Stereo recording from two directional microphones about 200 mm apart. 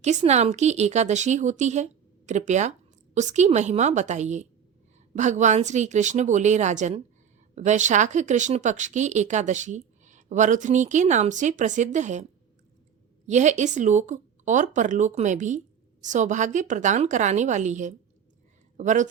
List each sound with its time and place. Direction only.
0.0 s speech: 35° right (ahead or behind)
13.2 s speech: 35° right (ahead or behind)